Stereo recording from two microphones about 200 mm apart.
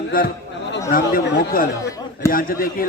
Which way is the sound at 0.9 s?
45° left (ahead or behind).